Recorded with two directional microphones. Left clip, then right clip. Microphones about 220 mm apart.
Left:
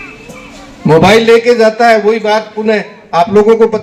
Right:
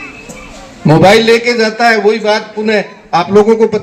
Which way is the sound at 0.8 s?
35° right (ahead or behind).